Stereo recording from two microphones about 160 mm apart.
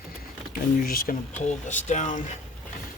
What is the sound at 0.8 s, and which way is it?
Speech, 60° left (ahead or behind).